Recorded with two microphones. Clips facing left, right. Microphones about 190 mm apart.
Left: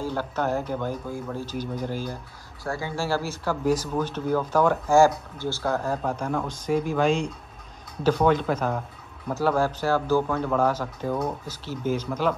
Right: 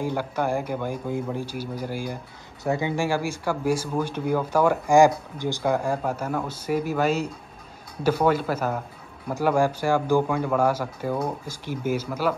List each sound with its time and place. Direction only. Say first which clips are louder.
0.0 s speech: right 1 dB; 15° right (ahead or behind)